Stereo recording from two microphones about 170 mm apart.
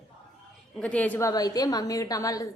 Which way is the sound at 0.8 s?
10° left (ahead or behind).